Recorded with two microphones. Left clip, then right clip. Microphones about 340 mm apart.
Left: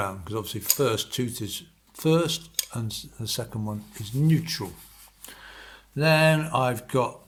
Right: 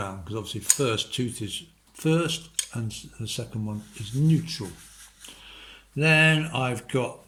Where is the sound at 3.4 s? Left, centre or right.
Left.